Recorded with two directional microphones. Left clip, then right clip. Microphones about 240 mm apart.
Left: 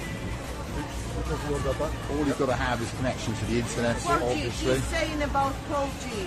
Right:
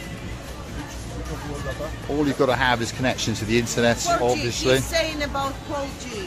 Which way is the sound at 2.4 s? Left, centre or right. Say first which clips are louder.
Right 7 dB; right.